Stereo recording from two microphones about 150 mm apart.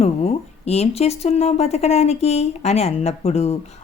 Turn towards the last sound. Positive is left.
turn(degrees=45)  # may be behind; listen again after turning